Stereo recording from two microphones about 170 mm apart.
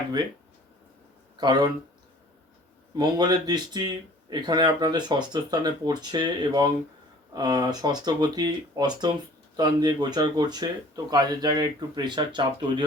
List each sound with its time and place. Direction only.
1.4 s speech: 25° right (ahead or behind)
2.9 s speech: 25° right (ahead or behind)